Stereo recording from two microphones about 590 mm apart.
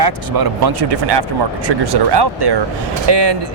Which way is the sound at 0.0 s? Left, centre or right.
Right.